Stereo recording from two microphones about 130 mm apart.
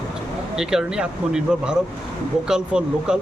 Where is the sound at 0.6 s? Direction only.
5° right (ahead or behind).